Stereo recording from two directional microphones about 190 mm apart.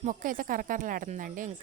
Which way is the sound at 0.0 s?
45° right (ahead or behind).